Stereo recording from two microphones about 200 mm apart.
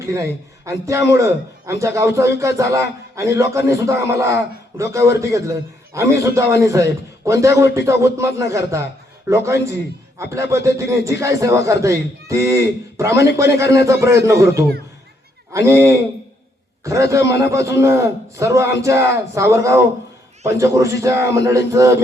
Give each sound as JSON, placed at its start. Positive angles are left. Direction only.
{"t": 0.0, "sound": "a man's voice", "side_deg": -15}